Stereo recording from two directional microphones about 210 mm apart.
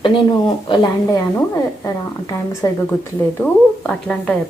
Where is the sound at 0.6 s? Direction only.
20° left (ahead or behind).